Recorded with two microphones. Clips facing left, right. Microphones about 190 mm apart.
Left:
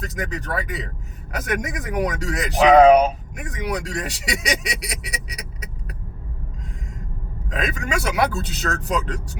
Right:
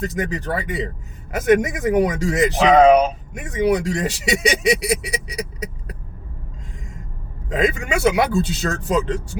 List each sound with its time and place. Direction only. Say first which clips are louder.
0.0 s speech: right 5 dB; 30° right (ahead or behind)
7.5 s speech: right 5 dB; 25° right (ahead or behind)